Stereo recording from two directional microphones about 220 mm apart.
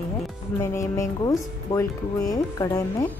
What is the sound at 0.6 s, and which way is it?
Speech, 15° left (ahead or behind).